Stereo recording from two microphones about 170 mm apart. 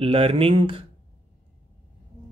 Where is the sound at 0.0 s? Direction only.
35° right (ahead or behind).